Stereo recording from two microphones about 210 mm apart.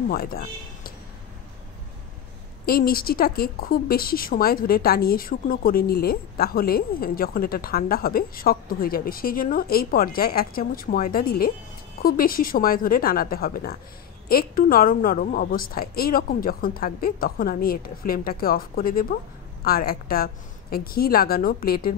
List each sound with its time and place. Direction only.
0.1 s a man's voice: 45° left (ahead or behind)
2.6 s speech: 45° left (ahead or behind)